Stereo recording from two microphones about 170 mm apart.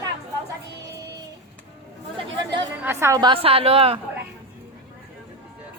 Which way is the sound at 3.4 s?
35° right (ahead or behind).